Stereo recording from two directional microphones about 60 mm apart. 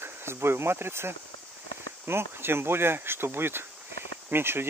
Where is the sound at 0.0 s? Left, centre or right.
Right.